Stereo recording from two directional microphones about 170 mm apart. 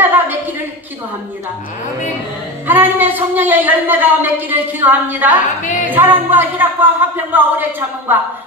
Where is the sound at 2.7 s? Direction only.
10° right (ahead or behind).